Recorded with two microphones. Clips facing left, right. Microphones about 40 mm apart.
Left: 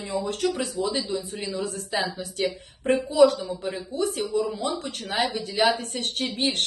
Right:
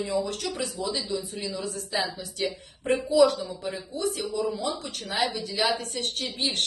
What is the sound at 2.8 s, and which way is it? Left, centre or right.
A woman's voice, left.